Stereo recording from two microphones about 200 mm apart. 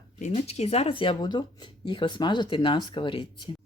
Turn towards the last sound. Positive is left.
turn(degrees=25)  # may be behind; listen again after turning